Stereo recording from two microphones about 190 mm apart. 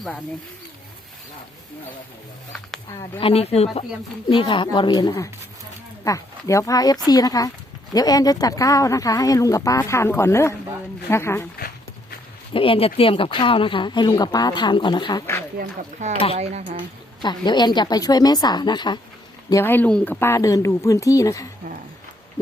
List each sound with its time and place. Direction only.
3.2 s speech: 30° left (ahead or behind); by 11.4 s 15° left (ahead or behind)
12.5 s speech: 30° left (ahead or behind)
15.5 s speech: 40° right (ahead or behind)
17.2 s speech: 25° left (ahead or behind)